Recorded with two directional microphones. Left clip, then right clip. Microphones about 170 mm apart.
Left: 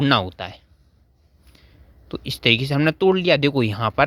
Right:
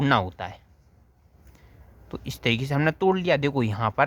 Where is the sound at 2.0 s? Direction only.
25° left (ahead or behind).